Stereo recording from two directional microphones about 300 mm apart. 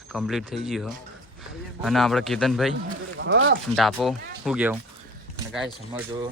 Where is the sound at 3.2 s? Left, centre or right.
Right.